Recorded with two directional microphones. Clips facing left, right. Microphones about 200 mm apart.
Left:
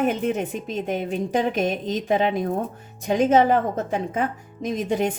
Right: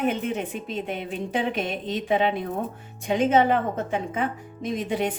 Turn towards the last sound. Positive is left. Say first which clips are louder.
# left 3 dB
turn(degrees=45)  # may be behind; listen again after turning